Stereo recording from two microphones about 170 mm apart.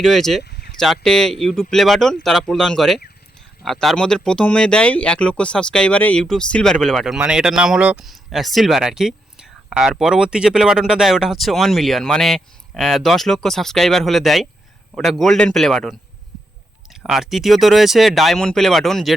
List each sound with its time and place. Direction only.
0.0 s speech: centre (ahead or behind)
0.4 s a sound: 70° left (ahead or behind)
0.8 s speech: 5° left (ahead or behind)